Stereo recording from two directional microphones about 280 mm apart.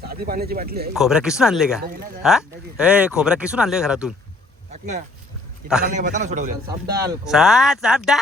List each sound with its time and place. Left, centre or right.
0.0 s speech: right
0.9 s speech: centre
4.7 s a man's voice: right
6.7 s speech: centre
7.3 s speech: centre